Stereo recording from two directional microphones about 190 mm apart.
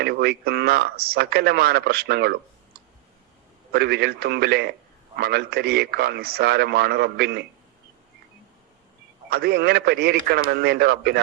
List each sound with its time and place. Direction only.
0.0 s speech: 60° right (ahead or behind)
3.7 s speech: 60° right (ahead or behind)
9.3 s speech: 55° right (ahead or behind)